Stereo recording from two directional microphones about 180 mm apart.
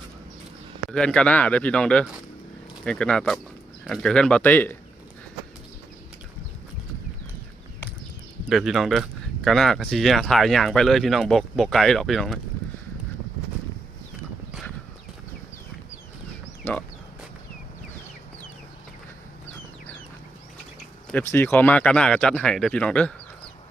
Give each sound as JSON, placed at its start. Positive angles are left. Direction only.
{"t": 0.9, "sound": "speech", "side_deg": 5}
{"t": 8.4, "sound": "speech", "side_deg": 0}
{"t": 21.1, "sound": "speech", "side_deg": 10}